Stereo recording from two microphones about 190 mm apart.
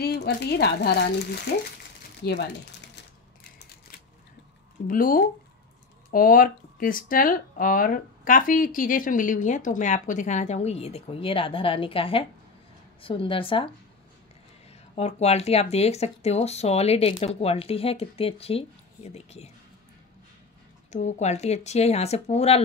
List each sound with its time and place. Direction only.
0.0 s speech: 55° left (ahead or behind)
4.8 s a woman's voice: 45° left (ahead or behind); by 13.7 s 25° left (ahead or behind)
14.7 s speech: 35° left (ahead or behind)
20.9 s speech: 40° left (ahead or behind)